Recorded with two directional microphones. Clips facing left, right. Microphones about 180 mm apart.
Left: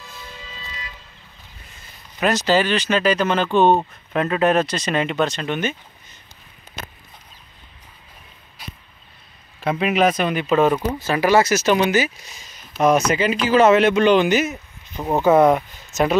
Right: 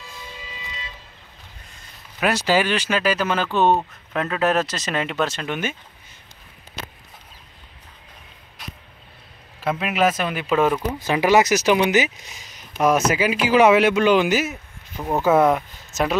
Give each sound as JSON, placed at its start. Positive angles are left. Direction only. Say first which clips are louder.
{"t": 1.8, "sound": "speech", "louder": "left 2 dB", "side_deg": -5}
{"t": 9.6, "sound": "speech", "louder": "left 3 dB", "side_deg": 0}
{"t": 11.1, "sound": "speech", "louder": "even", "side_deg": -15}
{"t": 13.1, "sound": "speech", "louder": "left 1 dB", "side_deg": -5}